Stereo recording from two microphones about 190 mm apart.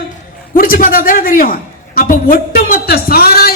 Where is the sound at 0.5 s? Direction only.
45° left (ahead or behind).